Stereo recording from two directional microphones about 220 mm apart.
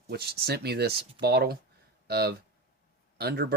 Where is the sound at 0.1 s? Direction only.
45° right (ahead or behind).